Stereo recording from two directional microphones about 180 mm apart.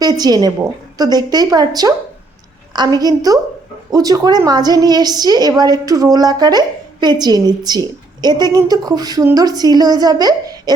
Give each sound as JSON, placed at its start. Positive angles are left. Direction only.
{"t": 0.0, "sound": "a woman's voice", "side_deg": -20}